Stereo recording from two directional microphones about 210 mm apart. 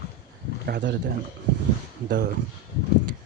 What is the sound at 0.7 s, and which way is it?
Speech, 55° right (ahead or behind).